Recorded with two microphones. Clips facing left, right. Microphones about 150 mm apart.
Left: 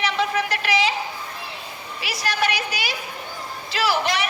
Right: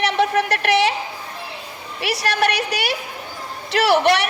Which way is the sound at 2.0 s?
65° right (ahead or behind).